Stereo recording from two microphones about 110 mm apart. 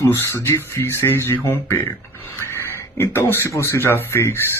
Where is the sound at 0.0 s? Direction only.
25° left (ahead or behind).